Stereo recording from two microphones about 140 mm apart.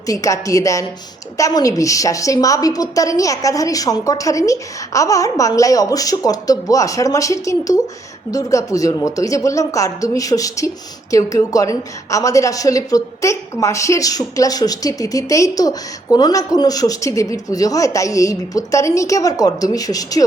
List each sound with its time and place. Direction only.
0.1 s a woman's voice: 25° left (ahead or behind)